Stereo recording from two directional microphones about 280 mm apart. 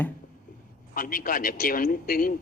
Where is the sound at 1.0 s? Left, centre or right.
Left.